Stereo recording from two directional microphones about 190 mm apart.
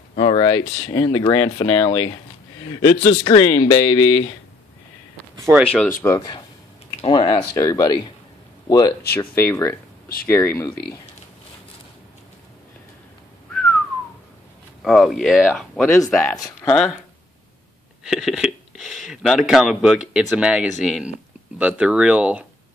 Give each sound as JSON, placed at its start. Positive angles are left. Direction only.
{"t": 0.1, "sound": "speech", "side_deg": 30}
{"t": 5.5, "sound": "speech", "side_deg": -5}
{"t": 6.0, "sound": "speech", "side_deg": 20}
{"t": 13.5, "sound": "whistling", "side_deg": 5}
{"t": 14.8, "sound": "speech", "side_deg": 0}
{"t": 16.2, "sound": "speech", "side_deg": 15}
{"t": 16.7, "sound": "speech", "side_deg": 5}
{"t": 18.0, "sound": "speech", "side_deg": 0}